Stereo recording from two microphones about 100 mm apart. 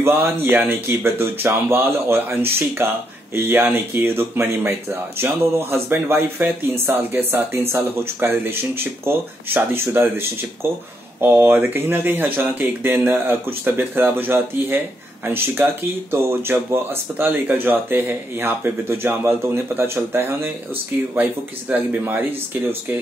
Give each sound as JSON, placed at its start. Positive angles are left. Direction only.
{"t": 0.0, "sound": "speech", "side_deg": -20}